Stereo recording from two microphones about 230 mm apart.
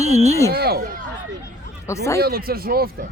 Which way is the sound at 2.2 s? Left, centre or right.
Right.